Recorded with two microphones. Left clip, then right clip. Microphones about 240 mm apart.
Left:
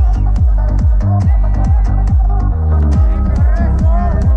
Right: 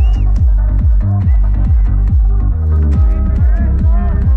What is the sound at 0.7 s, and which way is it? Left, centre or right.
Music, left.